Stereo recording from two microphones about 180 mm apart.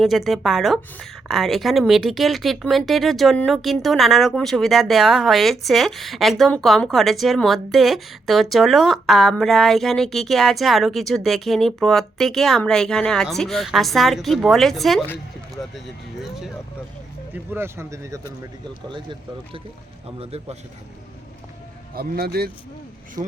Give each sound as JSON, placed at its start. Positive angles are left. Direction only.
{"t": 0.0, "sound": "a woman's voice", "side_deg": 0}
{"t": 16.2, "sound": "a woman's voice", "side_deg": 0}
{"t": 17.3, "sound": "speech", "side_deg": -10}
{"t": 18.9, "sound": "speech", "side_deg": -25}
{"t": 20.1, "sound": "speech", "side_deg": -35}
{"t": 21.9, "sound": "speech", "side_deg": -60}
{"t": 23.2, "sound": "speech", "side_deg": -20}